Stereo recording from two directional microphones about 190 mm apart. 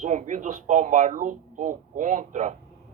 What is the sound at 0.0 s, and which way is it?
Speech, 40° right (ahead or behind).